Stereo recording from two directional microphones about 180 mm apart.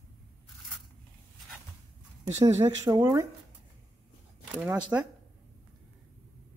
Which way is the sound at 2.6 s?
20° right (ahead or behind).